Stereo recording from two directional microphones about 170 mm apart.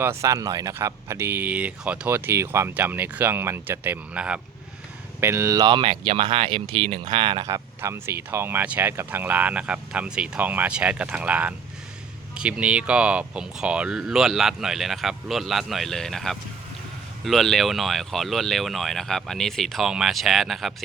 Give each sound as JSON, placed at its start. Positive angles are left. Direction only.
{"t": 0.0, "sound": "speech", "side_deg": -15}